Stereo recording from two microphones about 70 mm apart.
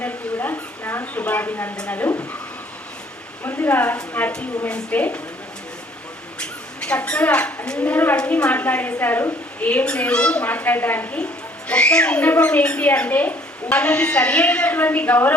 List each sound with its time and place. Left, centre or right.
0.0 s a sound: left
1.2 s speech: left
3.4 s speech: left
4.2 s a woman's voice: centre
6.4 s speech: centre
11.7 s speech: centre